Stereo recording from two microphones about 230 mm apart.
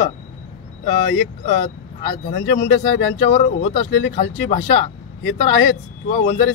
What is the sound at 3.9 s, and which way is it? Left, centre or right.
Speech, left.